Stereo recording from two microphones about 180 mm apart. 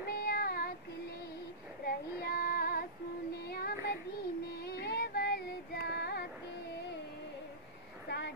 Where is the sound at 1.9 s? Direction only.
55° left (ahead or behind).